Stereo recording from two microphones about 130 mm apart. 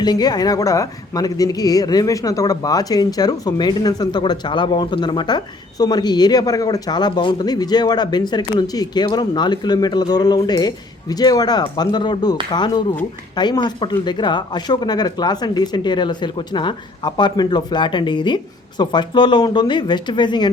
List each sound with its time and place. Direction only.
0.0 s speech: 30° left (ahead or behind)